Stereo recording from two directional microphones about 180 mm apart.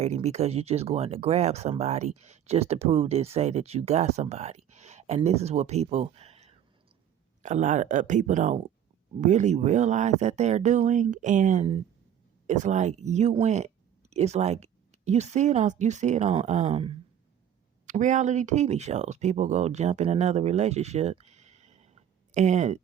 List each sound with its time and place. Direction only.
0.0 s speech: 40° right (ahead or behind)